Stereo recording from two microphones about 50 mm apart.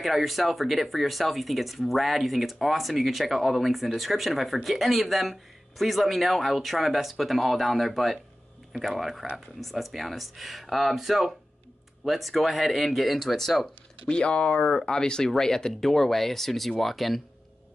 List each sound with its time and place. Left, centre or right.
0.0 s speech: centre
14.0 s speech: left; by 17.2 s centre